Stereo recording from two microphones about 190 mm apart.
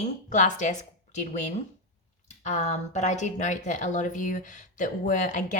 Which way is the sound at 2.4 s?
35° left (ahead or behind).